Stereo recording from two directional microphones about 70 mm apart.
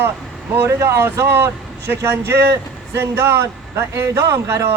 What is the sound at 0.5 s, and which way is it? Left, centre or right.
A man's voice, right.